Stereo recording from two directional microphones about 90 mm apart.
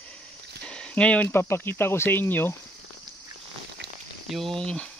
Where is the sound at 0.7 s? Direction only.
10° left (ahead or behind).